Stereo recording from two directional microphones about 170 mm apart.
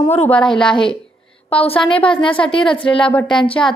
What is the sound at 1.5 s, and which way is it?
A woman's voice, 35° left (ahead or behind).